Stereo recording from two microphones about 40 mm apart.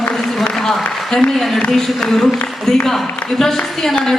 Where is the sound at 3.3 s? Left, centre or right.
Centre.